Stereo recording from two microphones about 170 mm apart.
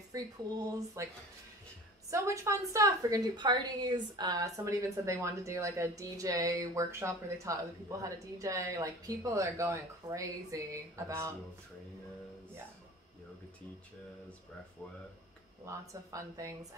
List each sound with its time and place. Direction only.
0.1 s a woman's voice: 20° right (ahead or behind)
2.0 s a woman's voice: 20° right (ahead or behind)
15.6 s a woman's voice: 20° right (ahead or behind)